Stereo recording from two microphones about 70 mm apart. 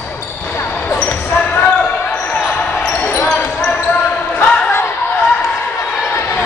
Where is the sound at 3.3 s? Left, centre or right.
Centre.